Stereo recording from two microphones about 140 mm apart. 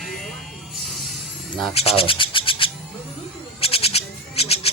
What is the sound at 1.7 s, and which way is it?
Speech, 45° left (ahead or behind).